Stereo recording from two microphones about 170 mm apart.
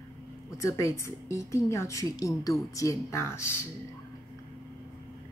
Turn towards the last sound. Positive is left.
turn(degrees=15)  # may be behind; listen again after turning